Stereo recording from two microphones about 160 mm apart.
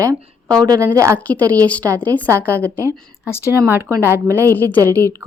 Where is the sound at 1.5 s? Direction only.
10° left (ahead or behind).